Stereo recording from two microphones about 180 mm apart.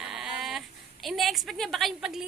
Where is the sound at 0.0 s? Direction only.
5° right (ahead or behind).